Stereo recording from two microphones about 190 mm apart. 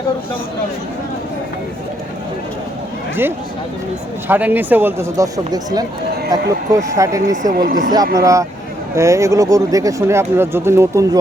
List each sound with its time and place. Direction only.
4.3 s speech: 10° right (ahead or behind)
7.5 s speech: 45° right (ahead or behind)
8.1 s speech: 15° right (ahead or behind)